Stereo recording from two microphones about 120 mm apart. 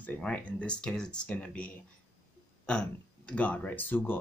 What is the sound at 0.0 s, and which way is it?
Speech, 10° left (ahead or behind).